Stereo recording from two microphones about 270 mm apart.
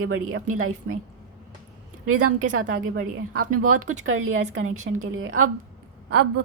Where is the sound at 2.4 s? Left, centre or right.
Right.